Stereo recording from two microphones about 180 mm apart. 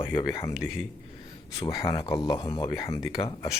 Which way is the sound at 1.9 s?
30° left (ahead or behind).